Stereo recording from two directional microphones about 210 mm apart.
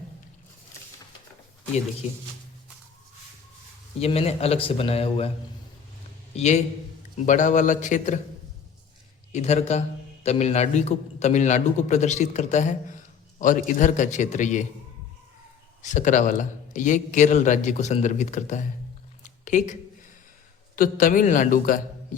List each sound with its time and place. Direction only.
4.0 s a man's voice: 30° left (ahead or behind)
6.3 s a man's voice: 30° left (ahead or behind)
9.3 s a man's voice: 30° left (ahead or behind)
15.8 s a man's voice: 35° left (ahead or behind)
20.7 s a man's voice: 40° left (ahead or behind)